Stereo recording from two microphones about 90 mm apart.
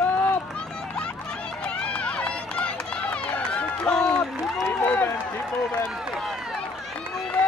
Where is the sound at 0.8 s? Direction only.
10° left (ahead or behind).